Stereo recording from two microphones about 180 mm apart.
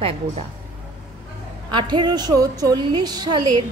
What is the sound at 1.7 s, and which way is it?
A woman's voice, 25° right (ahead or behind).